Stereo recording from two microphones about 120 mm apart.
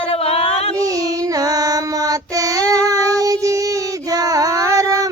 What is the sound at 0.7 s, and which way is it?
Child singing, 30° right (ahead or behind).